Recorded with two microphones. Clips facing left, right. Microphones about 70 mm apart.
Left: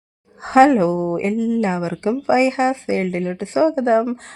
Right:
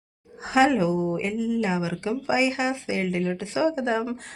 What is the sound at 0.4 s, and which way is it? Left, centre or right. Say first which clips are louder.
Speech: left 8 dB; left.